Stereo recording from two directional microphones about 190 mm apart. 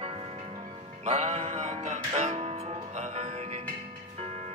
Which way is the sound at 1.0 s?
35° right (ahead or behind).